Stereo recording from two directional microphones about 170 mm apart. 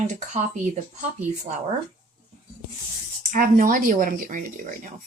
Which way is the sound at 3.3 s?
55° right (ahead or behind).